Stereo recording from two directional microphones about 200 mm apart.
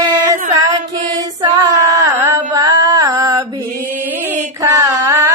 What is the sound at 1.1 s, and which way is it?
Female singing, 15° right (ahead or behind).